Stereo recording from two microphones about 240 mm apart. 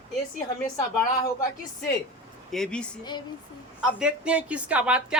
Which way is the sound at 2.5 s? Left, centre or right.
Centre.